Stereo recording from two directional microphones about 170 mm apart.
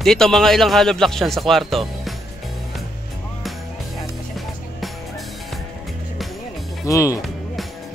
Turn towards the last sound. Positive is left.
turn(degrees=0)  # may be behind; listen again after turning